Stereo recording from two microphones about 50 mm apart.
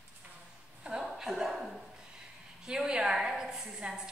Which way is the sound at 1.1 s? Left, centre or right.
Centre.